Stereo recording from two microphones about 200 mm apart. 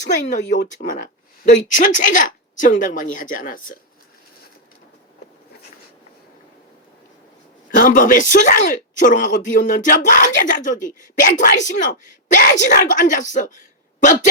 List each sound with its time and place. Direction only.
0.2 s speech: 40° left (ahead or behind)
7.8 s speech: 40° left (ahead or behind)